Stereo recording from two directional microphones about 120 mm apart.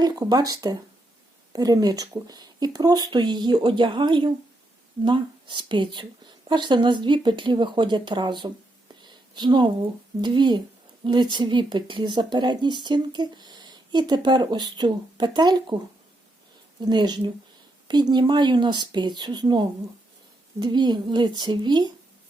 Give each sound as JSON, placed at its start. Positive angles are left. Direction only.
{"t": 0.0, "sound": "speech", "side_deg": -35}
{"t": 16.8, "sound": "speech", "side_deg": -35}